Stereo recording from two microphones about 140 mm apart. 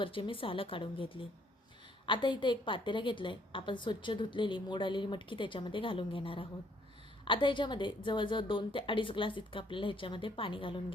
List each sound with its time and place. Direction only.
0.0 s a woman's voice: 40° left (ahead or behind)